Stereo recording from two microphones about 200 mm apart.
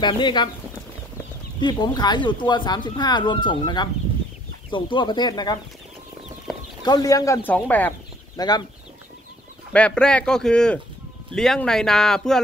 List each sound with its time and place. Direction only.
0.0 s speech: 20° left (ahead or behind)
1.6 s speech: 20° left (ahead or behind)
6.8 s speech: 20° left (ahead or behind)
8.4 s speech: 20° left (ahead or behind)
9.7 s speech: 5° left (ahead or behind)